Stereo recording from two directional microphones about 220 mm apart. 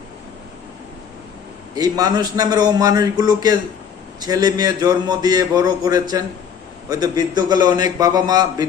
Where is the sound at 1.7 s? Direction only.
15° right (ahead or behind).